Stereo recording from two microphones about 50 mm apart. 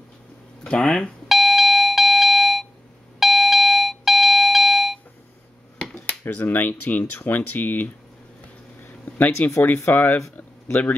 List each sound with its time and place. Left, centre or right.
0.7 s speech: centre
1.3 s doorbell: centre
6.2 s speech: left
8.8 s a sound: left
9.9 s speech: left